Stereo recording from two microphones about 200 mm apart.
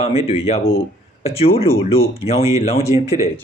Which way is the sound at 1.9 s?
30° left (ahead or behind).